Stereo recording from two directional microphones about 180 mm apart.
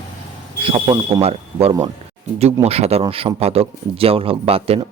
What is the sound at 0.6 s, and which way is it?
A man's voice, 30° right (ahead or behind).